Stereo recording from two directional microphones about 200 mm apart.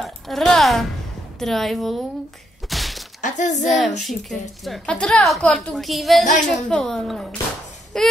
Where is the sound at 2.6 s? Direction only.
Centre (ahead or behind).